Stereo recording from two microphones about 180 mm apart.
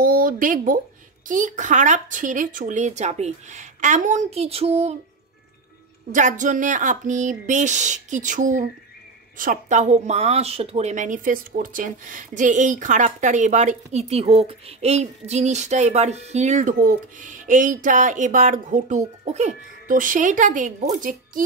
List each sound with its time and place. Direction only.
0.0 s a woman's voice: 55° right (ahead or behind); by 4.9 s 35° right (ahead or behind)
6.1 s a woman's voice: 45° right (ahead or behind)